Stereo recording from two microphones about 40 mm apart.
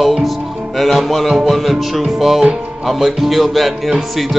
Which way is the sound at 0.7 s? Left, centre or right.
Centre.